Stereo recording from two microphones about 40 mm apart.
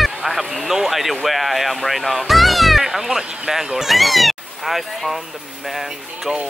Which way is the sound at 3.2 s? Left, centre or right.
Right.